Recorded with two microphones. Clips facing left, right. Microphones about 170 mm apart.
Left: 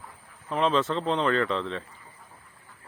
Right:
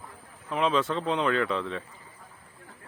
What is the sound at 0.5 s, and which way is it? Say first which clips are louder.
Speech: left 1 dB; 5° right (ahead or behind).